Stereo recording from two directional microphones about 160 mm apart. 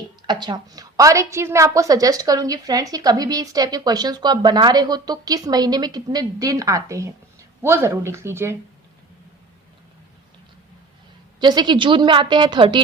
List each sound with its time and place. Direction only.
0.3 s a woman's voice: 25° right (ahead or behind)
11.3 s a woman's voice: 25° right (ahead or behind)